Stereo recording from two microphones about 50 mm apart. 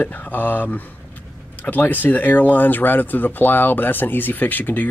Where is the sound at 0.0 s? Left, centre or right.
Left.